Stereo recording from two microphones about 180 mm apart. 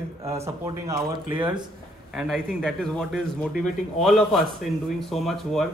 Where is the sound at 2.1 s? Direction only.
Centre (ahead or behind).